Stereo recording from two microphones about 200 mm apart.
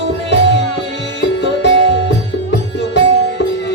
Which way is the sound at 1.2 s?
60° left (ahead or behind).